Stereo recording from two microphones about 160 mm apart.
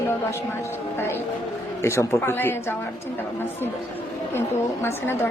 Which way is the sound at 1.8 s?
15° left (ahead or behind).